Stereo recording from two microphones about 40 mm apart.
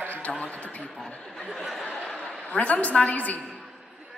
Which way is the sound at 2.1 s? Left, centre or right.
Left.